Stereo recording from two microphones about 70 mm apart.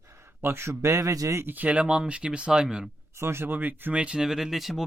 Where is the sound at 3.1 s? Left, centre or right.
Right.